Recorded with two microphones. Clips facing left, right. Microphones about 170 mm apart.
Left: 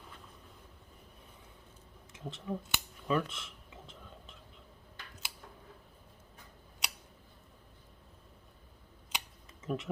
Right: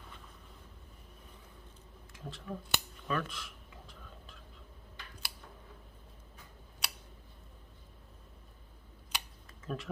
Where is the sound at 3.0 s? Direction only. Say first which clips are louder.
Left 5 dB; 20° left (ahead or behind).